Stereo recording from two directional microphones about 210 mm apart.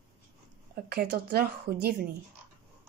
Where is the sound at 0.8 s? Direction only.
45° right (ahead or behind).